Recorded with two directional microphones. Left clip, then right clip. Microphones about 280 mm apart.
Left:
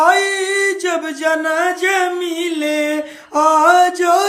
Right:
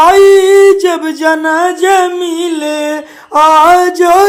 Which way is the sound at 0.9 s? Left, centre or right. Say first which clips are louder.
Right 6 dB; left.